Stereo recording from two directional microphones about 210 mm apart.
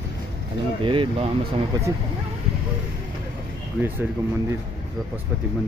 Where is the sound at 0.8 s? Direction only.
25° right (ahead or behind).